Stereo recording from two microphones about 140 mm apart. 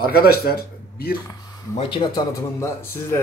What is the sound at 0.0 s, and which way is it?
Speech, 90° left.